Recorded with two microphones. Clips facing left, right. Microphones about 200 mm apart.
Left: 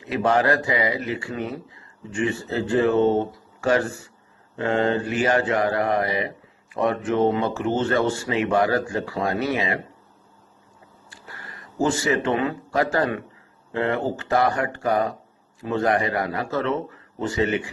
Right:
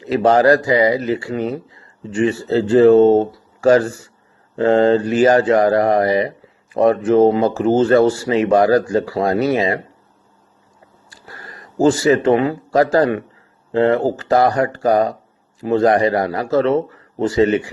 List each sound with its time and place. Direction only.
0.0 s speech: 40° right (ahead or behind)
11.1 s speech: 35° right (ahead or behind)